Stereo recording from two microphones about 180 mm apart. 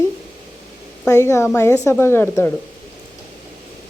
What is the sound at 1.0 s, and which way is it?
Speech, 15° left (ahead or behind).